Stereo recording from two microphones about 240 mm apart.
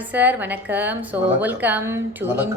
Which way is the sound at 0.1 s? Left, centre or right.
Centre.